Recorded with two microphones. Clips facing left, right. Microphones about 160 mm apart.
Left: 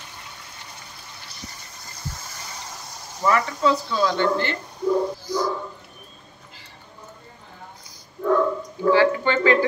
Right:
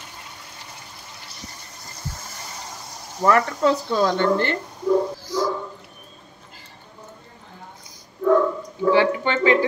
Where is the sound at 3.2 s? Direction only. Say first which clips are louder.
Right 2 dB; 50° right (ahead or behind).